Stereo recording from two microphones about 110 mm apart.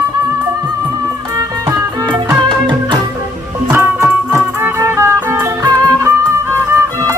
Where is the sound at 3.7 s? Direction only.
20° right (ahead or behind).